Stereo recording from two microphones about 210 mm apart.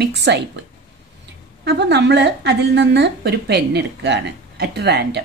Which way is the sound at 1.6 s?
50° right (ahead or behind).